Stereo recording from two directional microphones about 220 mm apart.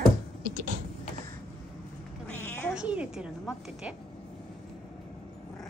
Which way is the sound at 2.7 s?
5° right (ahead or behind).